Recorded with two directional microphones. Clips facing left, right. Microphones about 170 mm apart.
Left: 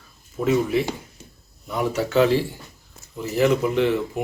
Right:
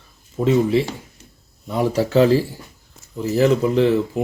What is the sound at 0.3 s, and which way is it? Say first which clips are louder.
Speech: right 4 dB; 25° right (ahead or behind).